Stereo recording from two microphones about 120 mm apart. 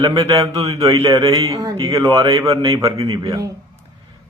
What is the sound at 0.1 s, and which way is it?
A woman's voice, 30° right (ahead or behind).